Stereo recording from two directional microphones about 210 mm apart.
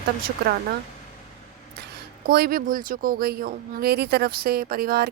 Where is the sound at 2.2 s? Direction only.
45° right (ahead or behind).